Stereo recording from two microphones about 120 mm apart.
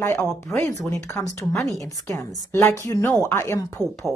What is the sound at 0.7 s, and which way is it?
Speech, 25° left (ahead or behind).